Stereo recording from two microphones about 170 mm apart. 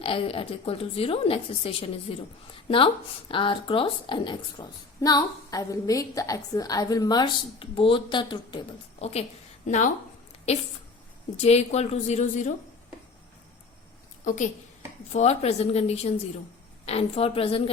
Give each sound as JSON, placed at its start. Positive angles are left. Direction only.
{"t": 0.0, "sound": "a woman's voice", "side_deg": 35}
{"t": 9.0, "sound": "a woman's voice", "side_deg": 40}
{"t": 11.3, "sound": "a woman's voice", "side_deg": 40}
{"t": 14.3, "sound": "a woman's voice", "side_deg": 45}